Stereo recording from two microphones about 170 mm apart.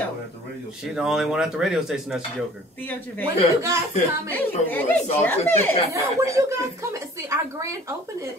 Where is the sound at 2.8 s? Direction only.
10° left (ahead or behind).